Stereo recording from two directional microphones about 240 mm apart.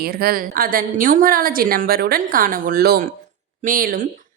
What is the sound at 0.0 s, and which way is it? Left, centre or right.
A woman's voice, right.